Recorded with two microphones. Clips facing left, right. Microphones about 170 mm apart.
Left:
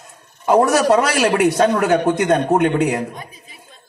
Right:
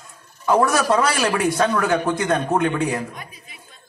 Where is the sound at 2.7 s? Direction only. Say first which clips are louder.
Left 5 dB; 65° left (ahead or behind).